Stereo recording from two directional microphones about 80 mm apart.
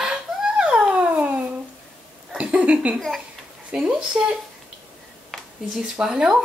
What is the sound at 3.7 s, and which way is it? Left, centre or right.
Speech, centre.